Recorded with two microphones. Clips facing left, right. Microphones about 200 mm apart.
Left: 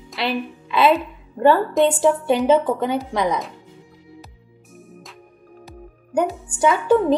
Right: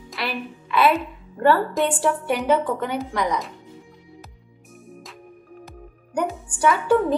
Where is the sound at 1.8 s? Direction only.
Centre (ahead or behind).